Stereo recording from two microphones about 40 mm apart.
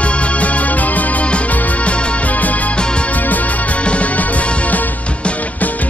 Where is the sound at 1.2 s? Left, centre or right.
Left.